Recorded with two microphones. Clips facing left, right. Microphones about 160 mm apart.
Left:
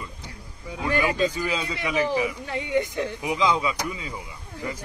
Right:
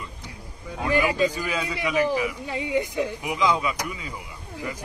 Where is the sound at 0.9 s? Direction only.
15° right (ahead or behind).